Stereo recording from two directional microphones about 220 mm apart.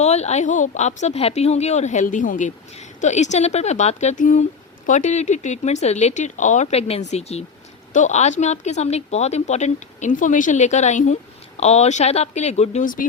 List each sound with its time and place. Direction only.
0.0 s speech: 30° left (ahead or behind)